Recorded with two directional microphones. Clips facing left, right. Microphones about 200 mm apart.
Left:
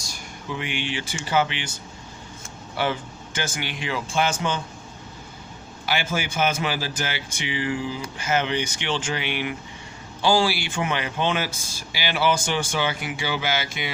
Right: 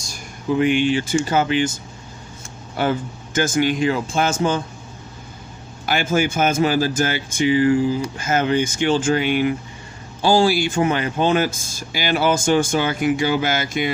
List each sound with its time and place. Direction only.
0.6 s speech: 45° right (ahead or behind)
2.7 s speech: 45° right (ahead or behind)
5.8 s speech: 45° right (ahead or behind)